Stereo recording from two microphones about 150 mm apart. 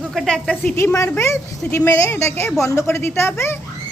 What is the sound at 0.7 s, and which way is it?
A woman's voice, 20° left (ahead or behind).